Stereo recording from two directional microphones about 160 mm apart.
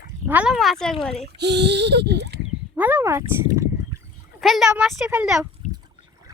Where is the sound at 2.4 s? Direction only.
10° right (ahead or behind).